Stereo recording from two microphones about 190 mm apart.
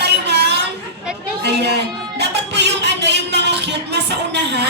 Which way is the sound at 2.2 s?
65° right (ahead or behind).